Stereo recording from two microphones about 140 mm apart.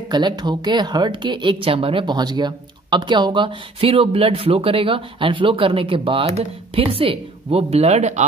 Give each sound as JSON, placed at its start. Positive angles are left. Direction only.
{"t": 0.1, "sound": "a woman's voice", "side_deg": -30}